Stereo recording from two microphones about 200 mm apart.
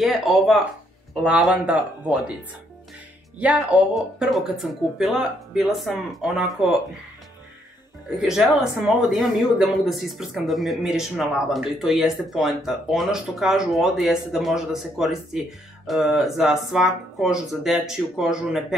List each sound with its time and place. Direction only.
0.0 s speech: centre (ahead or behind)
3.3 s speech: 5° right (ahead or behind)
8.2 s speech: 5° right (ahead or behind)